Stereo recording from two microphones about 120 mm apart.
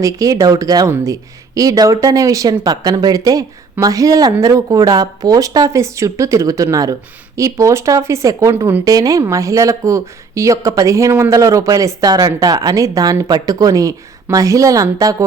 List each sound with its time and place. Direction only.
0.0 s speech: 30° right (ahead or behind)